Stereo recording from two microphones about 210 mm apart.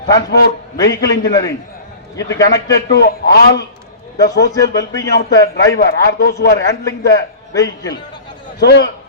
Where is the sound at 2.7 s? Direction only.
55° left (ahead or behind).